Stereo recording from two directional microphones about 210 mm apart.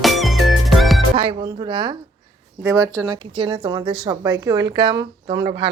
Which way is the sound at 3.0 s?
20° right (ahead or behind).